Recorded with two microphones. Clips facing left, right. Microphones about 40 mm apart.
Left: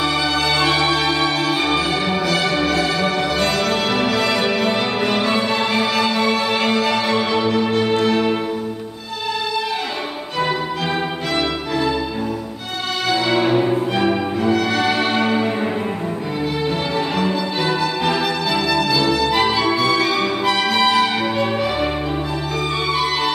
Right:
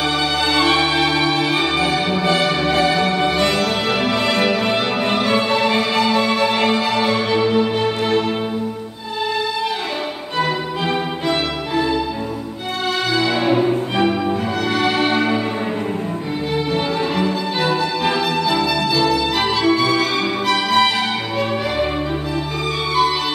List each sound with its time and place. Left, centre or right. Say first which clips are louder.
0.6 s music: right 3 dB; centre
2.6 s music: right 2 dB; right
3.0 s music: right 2 dB; centre
5.5 s music: right 2 dB; right
5.8 s music: right 1 dB; centre
7.7 s music: left 1 dB; centre
14.0 s music: left 1 dB; centre
17.2 s music: right 1 dB; centre
17.7 s music: even; centre